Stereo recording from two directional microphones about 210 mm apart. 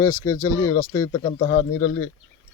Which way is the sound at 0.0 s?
15° left (ahead or behind).